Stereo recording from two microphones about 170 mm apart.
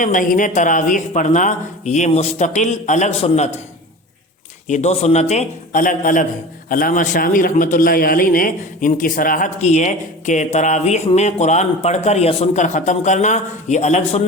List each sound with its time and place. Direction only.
0.0 s speech: 50° left (ahead or behind)
4.7 s speech: 40° left (ahead or behind)